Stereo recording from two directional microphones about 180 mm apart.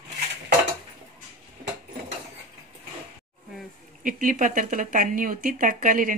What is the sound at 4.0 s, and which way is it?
A woman's voice, 50° right (ahead or behind).